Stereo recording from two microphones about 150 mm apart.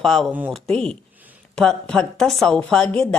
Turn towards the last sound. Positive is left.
turn(degrees=5)  # may be behind; listen again after turning